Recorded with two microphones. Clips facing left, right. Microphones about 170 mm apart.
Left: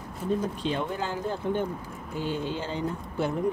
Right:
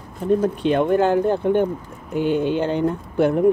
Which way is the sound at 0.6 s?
60° right (ahead or behind).